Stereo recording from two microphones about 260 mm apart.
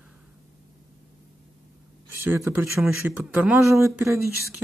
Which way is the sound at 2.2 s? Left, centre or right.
Centre.